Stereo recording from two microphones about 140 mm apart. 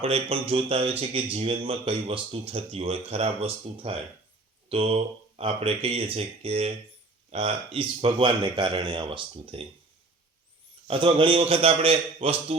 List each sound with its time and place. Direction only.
0.0 s speech: 45° right (ahead or behind)
10.8 s speech: 40° right (ahead or behind)